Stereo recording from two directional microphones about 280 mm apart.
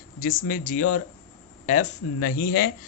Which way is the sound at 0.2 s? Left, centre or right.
Left.